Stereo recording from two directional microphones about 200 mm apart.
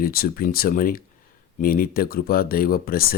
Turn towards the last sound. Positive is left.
turn(degrees=50)  # may be behind; listen again after turning